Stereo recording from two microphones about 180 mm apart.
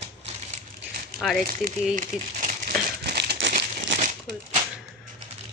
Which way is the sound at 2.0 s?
50° right (ahead or behind).